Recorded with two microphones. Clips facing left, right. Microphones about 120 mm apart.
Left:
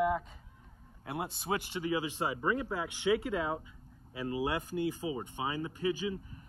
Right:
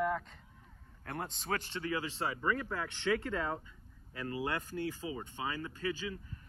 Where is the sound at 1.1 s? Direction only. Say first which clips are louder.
Left 3 dB; 10° left (ahead or behind).